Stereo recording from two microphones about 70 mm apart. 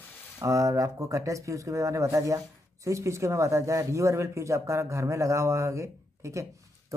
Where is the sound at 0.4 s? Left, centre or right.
Right.